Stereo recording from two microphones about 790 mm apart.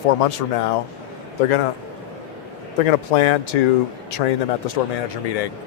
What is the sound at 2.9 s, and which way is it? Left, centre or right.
Speech, left.